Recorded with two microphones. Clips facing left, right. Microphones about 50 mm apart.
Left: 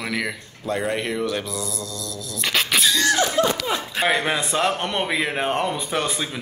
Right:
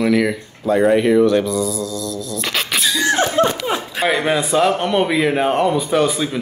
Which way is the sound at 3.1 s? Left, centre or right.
Right.